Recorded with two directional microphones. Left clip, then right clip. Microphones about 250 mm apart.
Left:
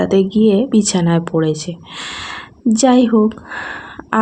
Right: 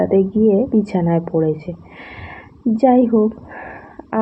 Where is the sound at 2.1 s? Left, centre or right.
Left.